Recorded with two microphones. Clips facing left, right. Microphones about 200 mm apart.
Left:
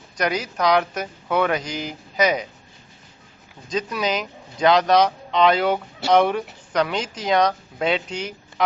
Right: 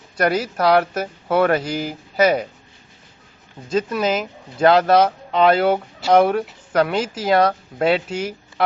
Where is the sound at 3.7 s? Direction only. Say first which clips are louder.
Right 5 dB; 50° right (ahead or behind).